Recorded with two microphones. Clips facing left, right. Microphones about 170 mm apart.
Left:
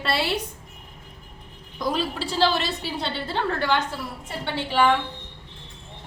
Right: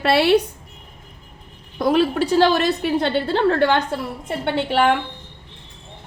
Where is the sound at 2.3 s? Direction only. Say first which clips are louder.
Right 5 dB; 50° right (ahead or behind).